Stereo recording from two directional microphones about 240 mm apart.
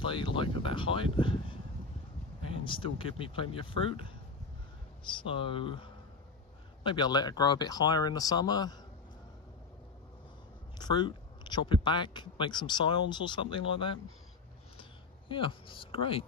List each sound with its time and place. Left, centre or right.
0.0 s speech: left
2.6 s speech: left
10.8 s speech: centre
14.8 s a sound: left